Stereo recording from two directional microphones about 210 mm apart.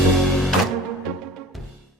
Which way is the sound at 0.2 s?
Centre (ahead or behind).